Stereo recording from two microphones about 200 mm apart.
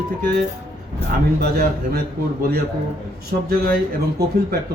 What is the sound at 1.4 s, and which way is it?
Speech, 50° right (ahead or behind).